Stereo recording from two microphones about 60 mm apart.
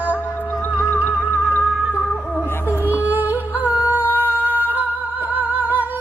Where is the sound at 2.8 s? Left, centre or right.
Right.